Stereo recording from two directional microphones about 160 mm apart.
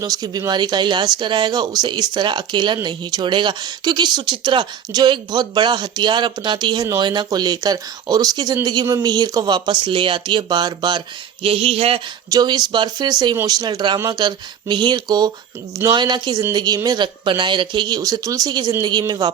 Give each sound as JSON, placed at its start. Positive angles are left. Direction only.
{"t": 0.0, "sound": "speech", "side_deg": -25}
{"t": 11.4, "sound": "a sound", "side_deg": -35}
{"t": 12.3, "sound": "speech", "side_deg": -25}